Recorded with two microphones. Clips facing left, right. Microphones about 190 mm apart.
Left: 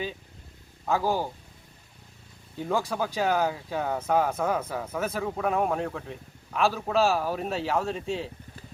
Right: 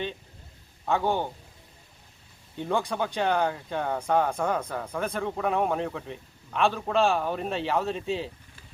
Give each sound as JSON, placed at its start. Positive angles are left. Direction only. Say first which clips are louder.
{"t": 0.9, "sound": "speech", "louder": "even", "side_deg": 0}
{"t": 2.6, "sound": "speech", "louder": "even", "side_deg": 0}